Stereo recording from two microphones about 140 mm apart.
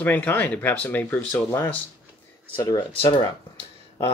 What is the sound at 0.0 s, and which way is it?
Speech, 10° left (ahead or behind).